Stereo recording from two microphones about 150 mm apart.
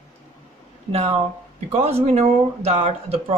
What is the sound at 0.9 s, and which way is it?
Speech, 40° right (ahead or behind).